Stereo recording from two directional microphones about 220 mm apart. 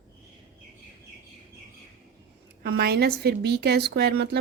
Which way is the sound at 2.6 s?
45° right (ahead or behind).